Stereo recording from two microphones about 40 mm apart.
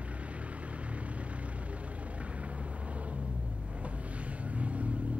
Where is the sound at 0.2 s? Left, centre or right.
Right.